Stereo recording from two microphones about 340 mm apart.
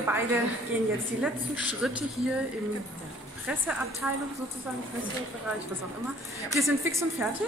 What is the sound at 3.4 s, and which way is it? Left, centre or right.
Speech, centre.